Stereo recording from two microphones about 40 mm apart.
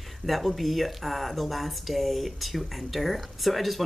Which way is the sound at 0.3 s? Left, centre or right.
Centre.